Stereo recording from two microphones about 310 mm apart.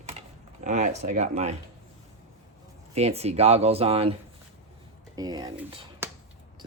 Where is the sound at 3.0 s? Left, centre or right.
Centre.